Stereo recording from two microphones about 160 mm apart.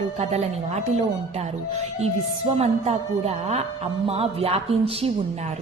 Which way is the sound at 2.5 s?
40° right (ahead or behind).